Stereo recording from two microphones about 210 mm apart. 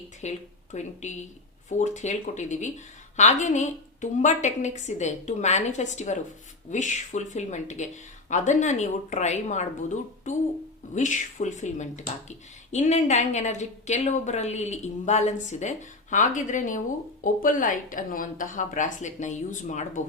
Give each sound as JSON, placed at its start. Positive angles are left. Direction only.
{"t": 0.2, "sound": "a woman's voice", "side_deg": 35}